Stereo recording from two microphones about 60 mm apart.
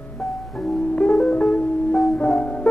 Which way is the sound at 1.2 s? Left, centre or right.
Left.